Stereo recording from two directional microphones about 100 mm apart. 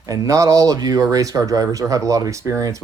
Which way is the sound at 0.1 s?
35° right (ahead or behind).